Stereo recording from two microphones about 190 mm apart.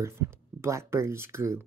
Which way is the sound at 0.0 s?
15° right (ahead or behind).